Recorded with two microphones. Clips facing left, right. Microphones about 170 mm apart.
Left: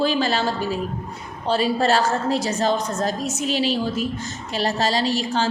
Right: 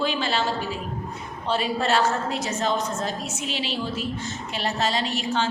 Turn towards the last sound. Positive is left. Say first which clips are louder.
# left 4 dB
turn(degrees=35)  # may be behind; listen again after turning